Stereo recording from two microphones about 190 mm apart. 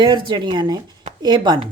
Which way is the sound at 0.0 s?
20° right (ahead or behind).